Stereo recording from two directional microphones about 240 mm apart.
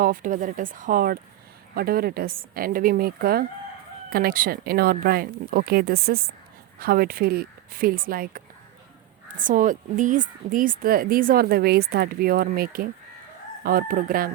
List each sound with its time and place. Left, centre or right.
0.0 s speech: right
9.4 s speech: right